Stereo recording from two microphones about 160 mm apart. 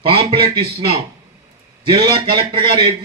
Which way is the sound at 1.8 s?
35° right (ahead or behind).